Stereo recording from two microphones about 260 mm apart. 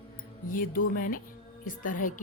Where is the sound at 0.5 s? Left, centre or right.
Left.